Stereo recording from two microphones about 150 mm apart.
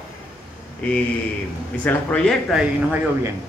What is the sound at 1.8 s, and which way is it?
Speech, 10° left (ahead or behind).